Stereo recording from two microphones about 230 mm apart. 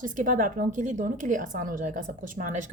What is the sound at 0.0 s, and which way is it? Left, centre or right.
A woman's voice, right.